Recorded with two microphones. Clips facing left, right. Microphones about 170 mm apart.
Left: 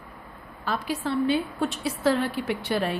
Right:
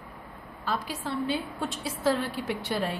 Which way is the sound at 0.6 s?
70° left (ahead or behind).